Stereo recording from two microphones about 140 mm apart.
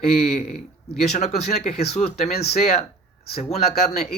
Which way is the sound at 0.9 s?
50° left (ahead or behind).